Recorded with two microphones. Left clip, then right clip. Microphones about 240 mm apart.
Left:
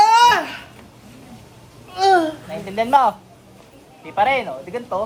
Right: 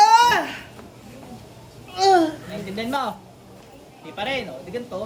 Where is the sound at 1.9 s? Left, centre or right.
Centre.